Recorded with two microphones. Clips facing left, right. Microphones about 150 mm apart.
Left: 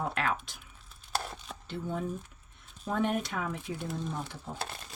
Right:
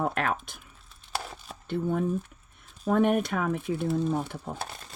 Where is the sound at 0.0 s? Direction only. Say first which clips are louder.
Right 4 dB; 50° right (ahead or behind).